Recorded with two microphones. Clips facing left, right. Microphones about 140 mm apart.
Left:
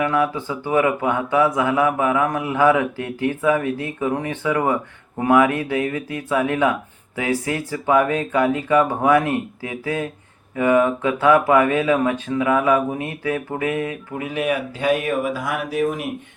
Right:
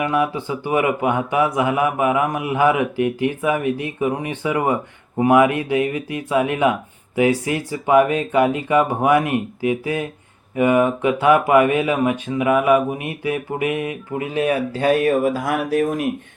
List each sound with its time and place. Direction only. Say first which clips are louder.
0.0 s speech: even; 20° right (ahead or behind)
14.3 s speech: right 3 dB; 35° right (ahead or behind)